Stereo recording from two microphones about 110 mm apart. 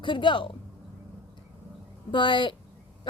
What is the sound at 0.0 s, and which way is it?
Speech, 45° left (ahead or behind).